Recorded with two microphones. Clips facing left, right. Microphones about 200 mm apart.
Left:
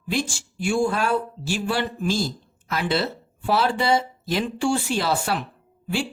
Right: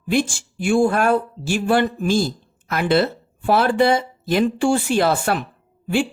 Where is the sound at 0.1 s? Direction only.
55° right (ahead or behind).